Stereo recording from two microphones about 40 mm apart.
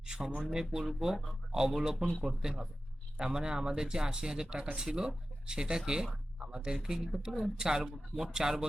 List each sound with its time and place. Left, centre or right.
0.1 s speech: right